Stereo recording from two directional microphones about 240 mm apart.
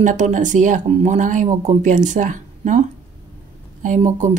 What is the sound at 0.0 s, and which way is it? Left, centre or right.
Speech, right.